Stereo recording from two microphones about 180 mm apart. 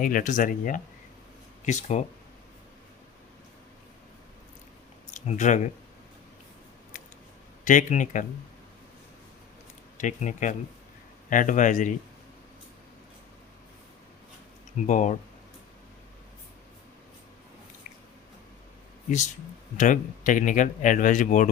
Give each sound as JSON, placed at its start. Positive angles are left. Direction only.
{"t": 0.0, "sound": "speech", "side_deg": 50}
{"t": 5.1, "sound": "speech", "side_deg": 40}
{"t": 7.6, "sound": "speech", "side_deg": 45}
{"t": 10.0, "sound": "speech", "side_deg": 45}
{"t": 14.8, "sound": "speech", "side_deg": 45}
{"t": 19.7, "sound": "speech", "side_deg": 45}